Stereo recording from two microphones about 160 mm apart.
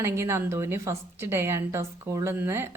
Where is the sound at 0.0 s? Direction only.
15° right (ahead or behind).